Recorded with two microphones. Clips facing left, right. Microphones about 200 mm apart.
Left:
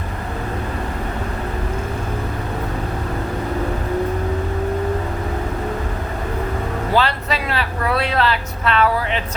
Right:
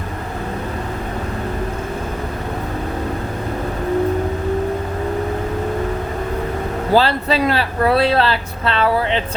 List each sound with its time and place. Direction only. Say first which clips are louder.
6.9 s speech: right 5 dB; 30° right (ahead or behind)